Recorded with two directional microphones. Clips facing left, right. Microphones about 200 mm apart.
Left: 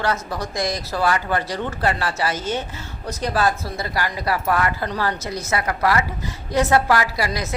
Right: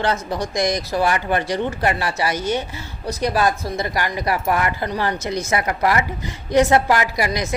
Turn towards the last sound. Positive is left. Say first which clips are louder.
# right 3 dB
turn(degrees=-15)  # may be behind; listen again after turning